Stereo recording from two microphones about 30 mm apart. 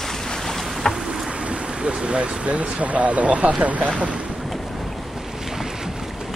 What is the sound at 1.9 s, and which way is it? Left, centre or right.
Speech, right.